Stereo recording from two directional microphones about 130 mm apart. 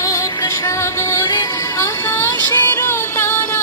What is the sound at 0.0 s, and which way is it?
Music, 25° left (ahead or behind).